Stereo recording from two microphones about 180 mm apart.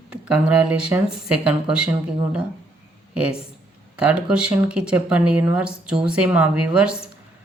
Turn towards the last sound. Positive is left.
turn(degrees=-5)  # may be behind; listen again after turning